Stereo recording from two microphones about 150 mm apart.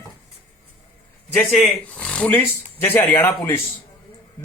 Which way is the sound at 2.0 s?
5° left (ahead or behind).